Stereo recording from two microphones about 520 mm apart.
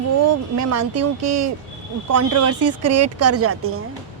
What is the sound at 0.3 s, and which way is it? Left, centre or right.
Speech, right.